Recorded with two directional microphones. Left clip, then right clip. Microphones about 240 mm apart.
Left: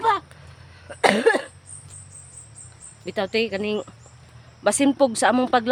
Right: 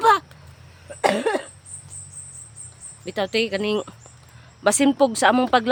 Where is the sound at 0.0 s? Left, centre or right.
Right.